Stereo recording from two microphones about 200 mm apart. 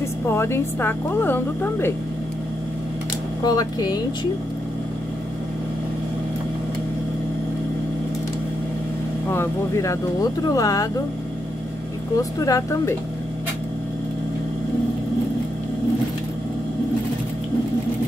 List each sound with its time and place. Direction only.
0.3 s speech: 10° left (ahead or behind)
3.4 s speech: 20° left (ahead or behind)
9.3 s speech: 15° left (ahead or behind)
12.2 s speech: 15° left (ahead or behind)